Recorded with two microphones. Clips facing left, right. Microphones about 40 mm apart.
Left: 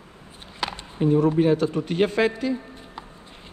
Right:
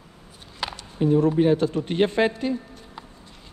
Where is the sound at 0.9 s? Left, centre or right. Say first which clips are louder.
Even; left.